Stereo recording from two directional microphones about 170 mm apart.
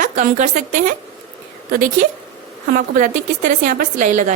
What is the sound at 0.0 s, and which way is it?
A woman's voice, 45° right (ahead or behind).